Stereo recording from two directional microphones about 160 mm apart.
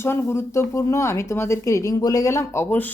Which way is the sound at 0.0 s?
15° left (ahead or behind).